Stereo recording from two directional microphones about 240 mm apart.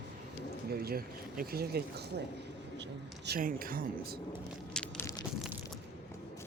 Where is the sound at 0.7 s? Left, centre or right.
Right.